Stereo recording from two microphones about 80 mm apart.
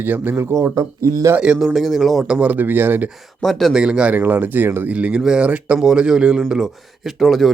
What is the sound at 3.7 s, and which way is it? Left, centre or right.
Speech, centre.